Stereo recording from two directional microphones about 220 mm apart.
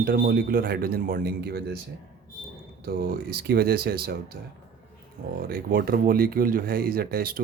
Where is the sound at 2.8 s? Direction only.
45° right (ahead or behind).